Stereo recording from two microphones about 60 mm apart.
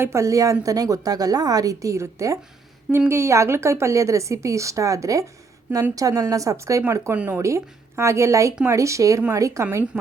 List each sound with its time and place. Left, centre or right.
0.0 s a woman's voice: right
6.8 s a woman's voice: right
9.9 s speech: right